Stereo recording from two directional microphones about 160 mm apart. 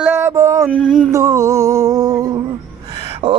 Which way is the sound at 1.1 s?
20° right (ahead or behind).